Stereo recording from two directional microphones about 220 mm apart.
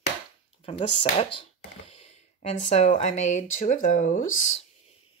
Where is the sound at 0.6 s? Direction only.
25° left (ahead or behind).